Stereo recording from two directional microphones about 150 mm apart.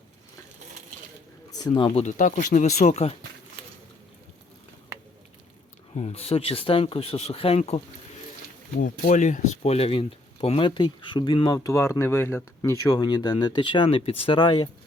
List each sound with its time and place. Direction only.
1.5 s speech: 25° left (ahead or behind)
2.0 s speech: 65° left (ahead or behind); by 3.2 s 45° left (ahead or behind)
5.9 s speech: 45° left (ahead or behind)
8.8 s speech: 55° left (ahead or behind); by 14.7 s 30° left (ahead or behind)